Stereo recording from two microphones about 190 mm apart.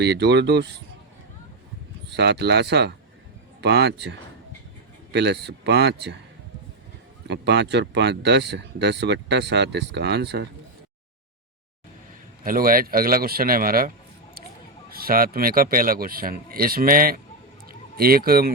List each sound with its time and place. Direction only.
0.0 s speech: 60° right (ahead or behind)
2.0 s speech: 65° right (ahead or behind)
7.3 s speech: 65° right (ahead or behind)
12.4 s speech: 50° right (ahead or behind)